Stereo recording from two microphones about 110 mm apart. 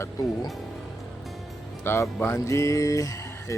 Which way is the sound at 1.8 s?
20° left (ahead or behind).